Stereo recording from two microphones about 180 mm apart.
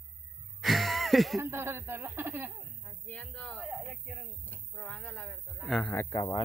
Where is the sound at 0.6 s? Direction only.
Centre (ahead or behind).